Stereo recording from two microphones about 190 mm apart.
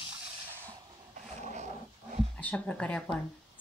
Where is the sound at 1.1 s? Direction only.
40° right (ahead or behind).